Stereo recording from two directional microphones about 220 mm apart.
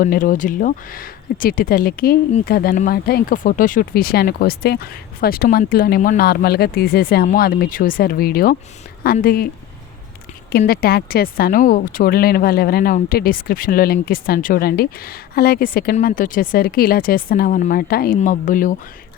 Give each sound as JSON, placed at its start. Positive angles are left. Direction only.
{"t": 0.0, "sound": "speech", "side_deg": 40}
{"t": 10.6, "sound": "speech", "side_deg": 45}